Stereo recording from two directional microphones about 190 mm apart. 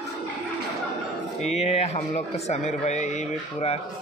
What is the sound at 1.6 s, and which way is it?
A man's voice, 35° left (ahead or behind).